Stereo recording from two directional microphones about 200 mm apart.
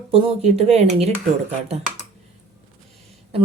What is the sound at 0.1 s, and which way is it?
Speech, 30° right (ahead or behind).